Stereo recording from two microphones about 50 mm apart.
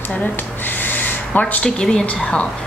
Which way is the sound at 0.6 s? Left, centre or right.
Left.